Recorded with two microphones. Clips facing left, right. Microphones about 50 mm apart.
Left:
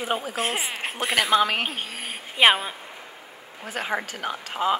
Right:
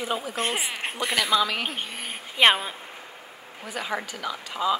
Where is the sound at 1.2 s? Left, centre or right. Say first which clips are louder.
Left 3 dB; left.